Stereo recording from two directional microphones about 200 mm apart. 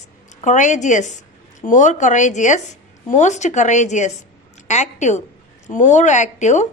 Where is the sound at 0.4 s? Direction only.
40° left (ahead or behind).